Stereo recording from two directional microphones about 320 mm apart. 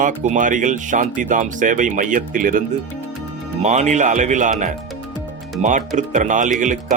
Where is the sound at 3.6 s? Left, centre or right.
Right.